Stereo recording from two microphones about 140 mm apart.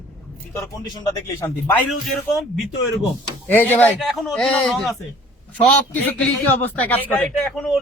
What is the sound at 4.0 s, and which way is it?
Speech, centre (ahead or behind).